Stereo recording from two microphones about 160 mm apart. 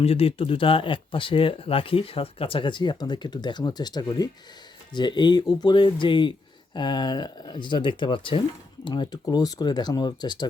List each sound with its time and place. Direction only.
0.0 s speech: 40° left (ahead or behind)